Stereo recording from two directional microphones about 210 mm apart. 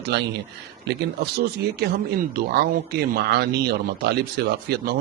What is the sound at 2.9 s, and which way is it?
Speech, 50° right (ahead or behind).